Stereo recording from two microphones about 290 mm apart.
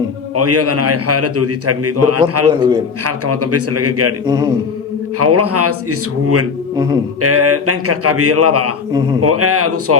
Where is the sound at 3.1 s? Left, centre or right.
Right.